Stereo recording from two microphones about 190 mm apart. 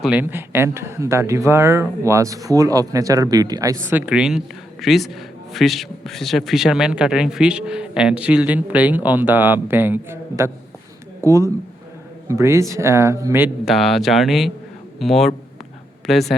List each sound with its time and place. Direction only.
0.0 s speech: 10° right (ahead or behind)
13.7 s speech: centre (ahead or behind)